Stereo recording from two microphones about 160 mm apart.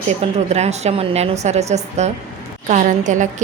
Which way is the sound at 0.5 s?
45° right (ahead or behind).